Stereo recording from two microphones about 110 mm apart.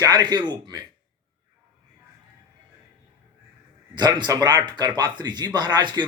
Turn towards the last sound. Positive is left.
turn(degrees=-45)  # may be behind; listen again after turning